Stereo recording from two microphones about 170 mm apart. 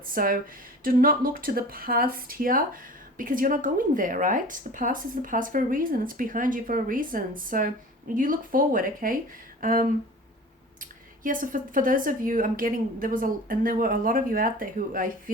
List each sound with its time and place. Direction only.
0.1 s speech: 55° right (ahead or behind)